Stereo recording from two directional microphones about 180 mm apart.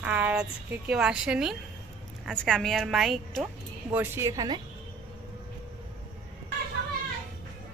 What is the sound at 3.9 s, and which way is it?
Speech, 10° right (ahead or behind).